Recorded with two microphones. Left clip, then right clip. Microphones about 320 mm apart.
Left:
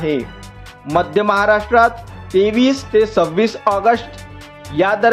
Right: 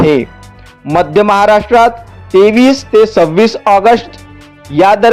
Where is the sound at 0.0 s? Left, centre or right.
Right.